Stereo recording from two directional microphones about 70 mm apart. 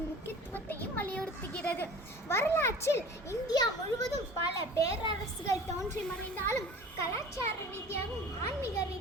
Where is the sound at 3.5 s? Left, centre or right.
Left.